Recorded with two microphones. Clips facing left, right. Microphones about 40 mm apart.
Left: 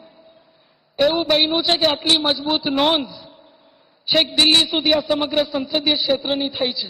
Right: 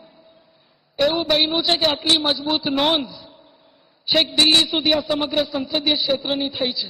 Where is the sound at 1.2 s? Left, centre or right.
Centre.